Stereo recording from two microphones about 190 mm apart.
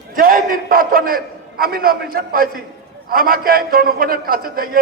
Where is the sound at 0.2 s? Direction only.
45° right (ahead or behind).